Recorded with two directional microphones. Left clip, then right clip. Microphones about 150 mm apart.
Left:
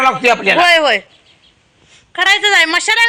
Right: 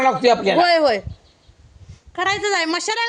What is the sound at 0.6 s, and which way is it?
Speech, 20° right (ahead or behind).